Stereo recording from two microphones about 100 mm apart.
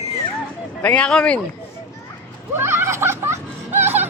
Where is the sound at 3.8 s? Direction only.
20° right (ahead or behind).